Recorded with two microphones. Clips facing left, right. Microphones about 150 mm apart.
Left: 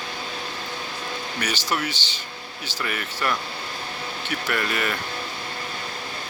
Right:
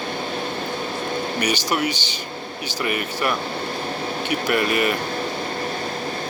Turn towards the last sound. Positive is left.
turn(degrees=-15)  # may be behind; listen again after turning